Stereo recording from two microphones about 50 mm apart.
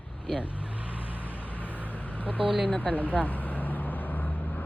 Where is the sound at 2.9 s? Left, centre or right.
Left.